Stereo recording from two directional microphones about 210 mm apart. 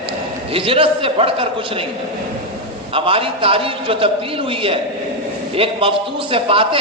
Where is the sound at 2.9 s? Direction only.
25° right (ahead or behind).